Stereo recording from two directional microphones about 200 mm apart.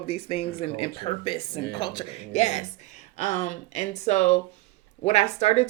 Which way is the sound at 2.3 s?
35° left (ahead or behind).